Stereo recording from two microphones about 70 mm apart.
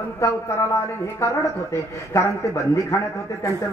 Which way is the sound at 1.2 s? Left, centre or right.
Left.